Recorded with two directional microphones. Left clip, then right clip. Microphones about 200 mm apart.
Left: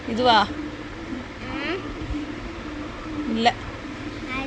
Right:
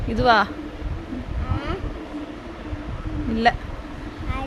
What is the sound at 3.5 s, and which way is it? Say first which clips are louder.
Speech: right 2 dB; 35° right (ahead or behind).